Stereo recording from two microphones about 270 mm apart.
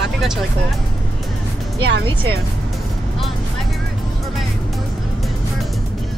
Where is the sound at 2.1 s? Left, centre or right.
Centre.